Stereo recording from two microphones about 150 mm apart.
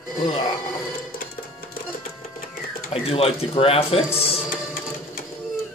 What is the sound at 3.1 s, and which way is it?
Speech, 40° left (ahead or behind).